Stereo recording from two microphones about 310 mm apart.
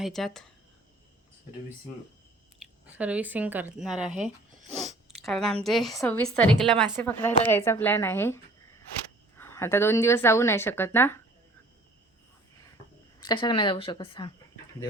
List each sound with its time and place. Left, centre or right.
0.0 s a woman's voice: centre
2.6 s a woman's voice: centre
9.4 s speech: centre
13.1 s speech: centre